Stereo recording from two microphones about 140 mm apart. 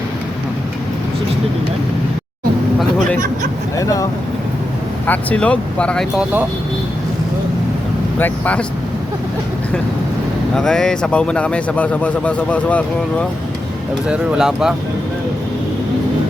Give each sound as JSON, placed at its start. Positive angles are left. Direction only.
{"t": 3.8, "sound": "speech", "side_deg": 25}
{"t": 5.0, "sound": "speech", "side_deg": 10}
{"t": 8.2, "sound": "speech", "side_deg": 10}
{"t": 10.5, "sound": "speech", "side_deg": 5}
{"t": 14.1, "sound": "speech", "side_deg": -5}